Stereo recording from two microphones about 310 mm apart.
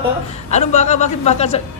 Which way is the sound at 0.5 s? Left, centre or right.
Left.